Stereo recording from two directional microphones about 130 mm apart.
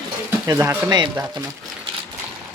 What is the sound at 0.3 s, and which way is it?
Speech, 20° right (ahead or behind).